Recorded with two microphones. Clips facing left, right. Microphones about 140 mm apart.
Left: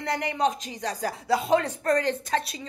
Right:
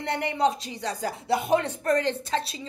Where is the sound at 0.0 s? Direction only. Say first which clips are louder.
Right 1 dB; 25° right (ahead or behind).